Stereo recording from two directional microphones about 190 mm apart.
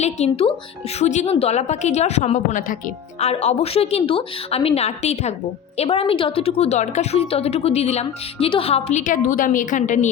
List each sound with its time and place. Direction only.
0.0 s a woman's voice: 35° left (ahead or behind)